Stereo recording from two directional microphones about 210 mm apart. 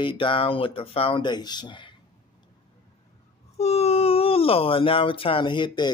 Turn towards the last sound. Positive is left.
turn(degrees=20)  # may be behind; listen again after turning